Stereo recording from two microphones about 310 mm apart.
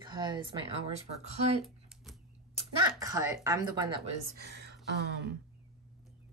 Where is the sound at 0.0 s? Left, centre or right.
Centre.